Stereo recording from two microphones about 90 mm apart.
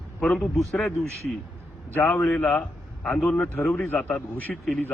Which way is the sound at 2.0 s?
25° left (ahead or behind).